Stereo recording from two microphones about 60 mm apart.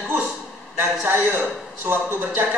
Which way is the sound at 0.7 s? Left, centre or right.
Right.